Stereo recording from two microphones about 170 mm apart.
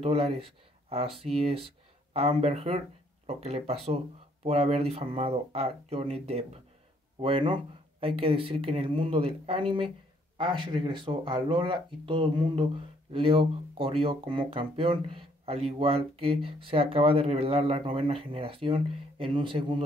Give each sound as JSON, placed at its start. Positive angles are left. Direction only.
{"t": 0.0, "sound": "speech", "side_deg": -35}